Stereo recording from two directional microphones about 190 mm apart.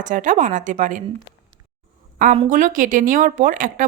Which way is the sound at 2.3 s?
40° right (ahead or behind).